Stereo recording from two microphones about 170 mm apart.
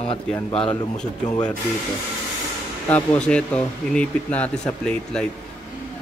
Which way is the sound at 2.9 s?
5° left (ahead or behind).